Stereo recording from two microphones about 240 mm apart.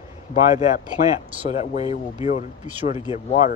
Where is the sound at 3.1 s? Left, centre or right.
Left.